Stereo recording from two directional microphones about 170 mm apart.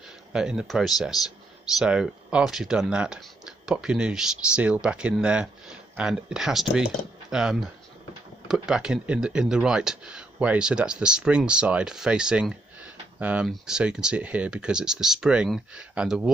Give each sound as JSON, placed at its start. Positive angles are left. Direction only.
{"t": 0.3, "sound": "speech", "side_deg": -5}